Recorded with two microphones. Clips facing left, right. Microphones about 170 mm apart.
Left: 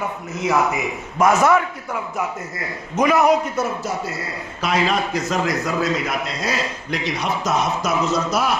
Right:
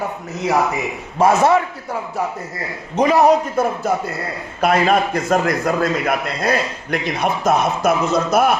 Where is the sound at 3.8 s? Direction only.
55° right (ahead or behind).